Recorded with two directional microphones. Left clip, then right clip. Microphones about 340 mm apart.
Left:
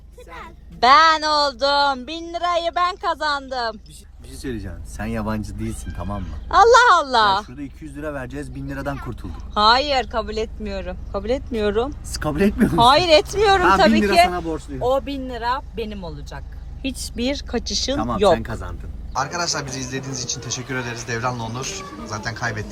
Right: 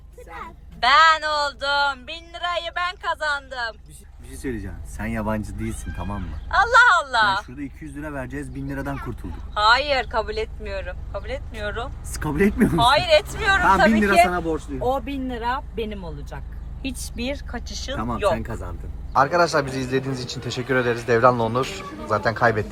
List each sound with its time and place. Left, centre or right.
0.8 s speech: centre
4.4 s speech: centre
12.1 s a man's voice: centre
12.7 s speech: centre
14.8 s speech: centre
16.8 s a man's voice: left; by 22.5 s centre